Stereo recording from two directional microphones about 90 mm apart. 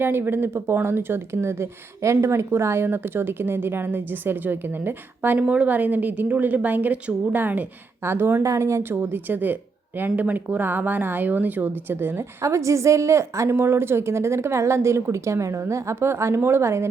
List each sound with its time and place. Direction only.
0.0 s speech: 25° right (ahead or behind)